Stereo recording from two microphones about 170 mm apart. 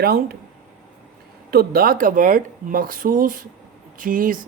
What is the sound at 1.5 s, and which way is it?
Speech, 60° right (ahead or behind).